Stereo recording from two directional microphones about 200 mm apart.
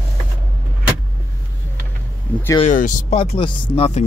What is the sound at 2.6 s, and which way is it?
Speech, 40° left (ahead or behind).